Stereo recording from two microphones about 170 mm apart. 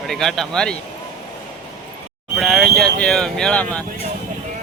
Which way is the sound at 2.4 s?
Centre (ahead or behind).